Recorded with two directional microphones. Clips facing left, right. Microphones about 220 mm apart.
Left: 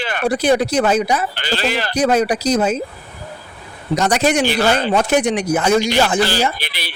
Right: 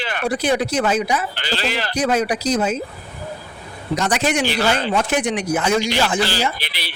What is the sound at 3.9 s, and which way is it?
Speech, 40° left (ahead or behind).